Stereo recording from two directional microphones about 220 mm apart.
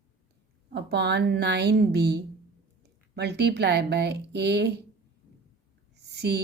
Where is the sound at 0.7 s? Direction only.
50° right (ahead or behind).